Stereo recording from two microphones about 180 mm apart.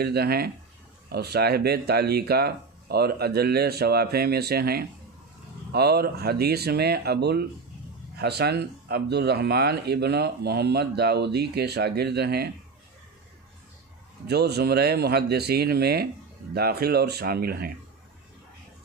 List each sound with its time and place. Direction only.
0.0 s speech: 60° right (ahead or behind)
14.2 s speech: 65° right (ahead or behind)